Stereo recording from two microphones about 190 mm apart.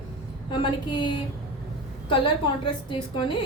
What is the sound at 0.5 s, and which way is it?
Speech, 25° left (ahead or behind).